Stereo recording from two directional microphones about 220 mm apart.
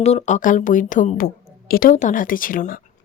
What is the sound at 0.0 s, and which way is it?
A woman's voice, 30° left (ahead or behind).